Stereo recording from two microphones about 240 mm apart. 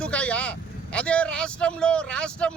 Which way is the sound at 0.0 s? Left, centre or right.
Centre.